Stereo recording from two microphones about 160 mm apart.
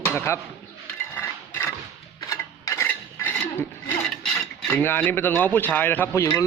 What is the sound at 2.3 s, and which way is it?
Dishes, 20° left (ahead or behind).